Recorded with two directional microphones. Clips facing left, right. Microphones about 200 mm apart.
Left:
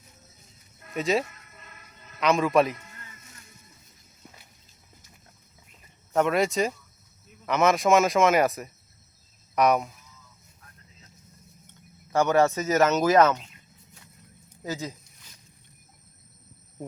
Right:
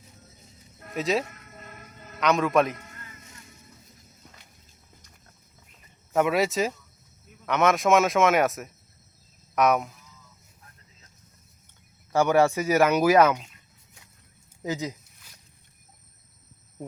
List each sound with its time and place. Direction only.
0.9 s speech: centre (ahead or behind)
1.5 s music: 45° right (ahead or behind)
2.2 s speech: centre (ahead or behind)
6.1 s speech: 5° right (ahead or behind)
12.1 s speech: 10° right (ahead or behind)
14.6 s speech: 15° right (ahead or behind)